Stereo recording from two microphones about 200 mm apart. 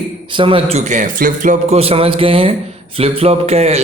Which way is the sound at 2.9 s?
30° right (ahead or behind).